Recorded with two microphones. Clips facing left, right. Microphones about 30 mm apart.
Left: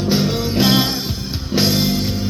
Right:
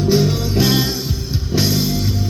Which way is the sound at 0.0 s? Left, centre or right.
Left.